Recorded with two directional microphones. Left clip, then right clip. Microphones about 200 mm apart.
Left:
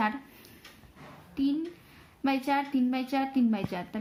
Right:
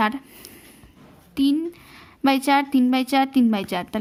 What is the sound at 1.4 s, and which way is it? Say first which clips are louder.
Speech: right 9 dB; 55° right (ahead or behind).